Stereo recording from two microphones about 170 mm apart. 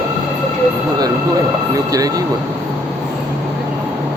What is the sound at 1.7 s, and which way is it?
Speech, 20° right (ahead or behind).